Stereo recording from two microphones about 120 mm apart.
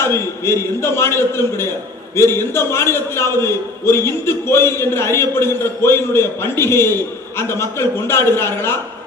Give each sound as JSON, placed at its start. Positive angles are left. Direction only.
{"t": 0.0, "sound": "a man's voice", "side_deg": 20}